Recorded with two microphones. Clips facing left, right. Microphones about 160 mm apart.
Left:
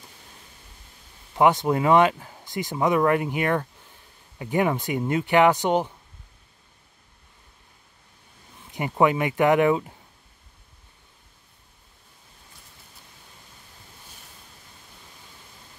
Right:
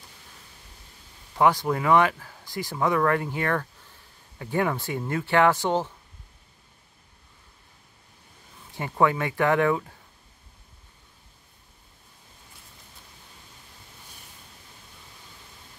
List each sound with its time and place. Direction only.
1.3 s speech: 20° left (ahead or behind)
8.7 s speech: 15° left (ahead or behind)